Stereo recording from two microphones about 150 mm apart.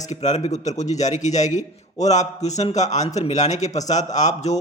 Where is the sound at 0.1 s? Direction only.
50° left (ahead or behind).